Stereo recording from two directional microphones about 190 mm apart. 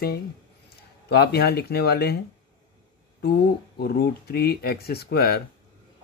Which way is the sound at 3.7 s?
55° left (ahead or behind).